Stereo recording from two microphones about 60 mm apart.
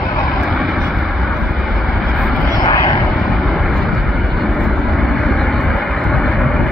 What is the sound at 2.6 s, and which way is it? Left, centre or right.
Vehicle, left.